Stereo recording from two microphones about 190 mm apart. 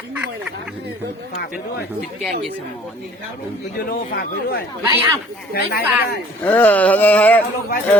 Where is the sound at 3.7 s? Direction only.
50° left (ahead or behind).